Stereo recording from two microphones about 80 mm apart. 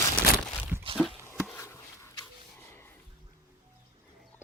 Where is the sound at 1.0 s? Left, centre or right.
Centre.